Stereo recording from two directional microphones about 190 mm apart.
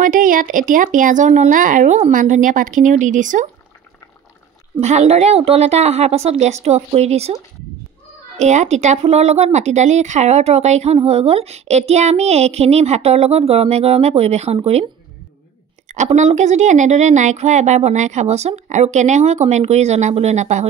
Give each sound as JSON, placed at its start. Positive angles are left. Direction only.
{"t": 0.0, "sound": "speech", "side_deg": -45}
{"t": 4.7, "sound": "speech", "side_deg": -35}
{"t": 8.4, "sound": "speech", "side_deg": -35}
{"t": 15.9, "sound": "speech", "side_deg": -40}